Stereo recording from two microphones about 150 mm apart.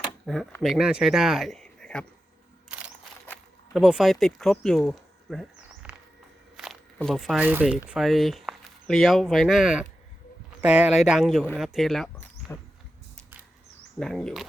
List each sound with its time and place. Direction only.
0.3 s speech: 5° right (ahead or behind)
2.6 s camera: 5° right (ahead or behind)
3.8 s speech: 5° right (ahead or behind)
6.6 s a sound: centre (ahead or behind)
7.4 s speech: 10° right (ahead or behind)
12.5 s insect: 20° left (ahead or behind)
14.0 s speech: 5° left (ahead or behind)